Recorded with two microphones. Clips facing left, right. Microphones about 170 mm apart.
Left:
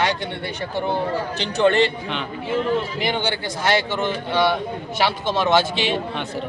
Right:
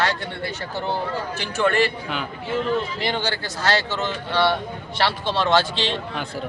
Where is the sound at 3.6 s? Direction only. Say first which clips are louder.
Left 2 dB; 15° left (ahead or behind).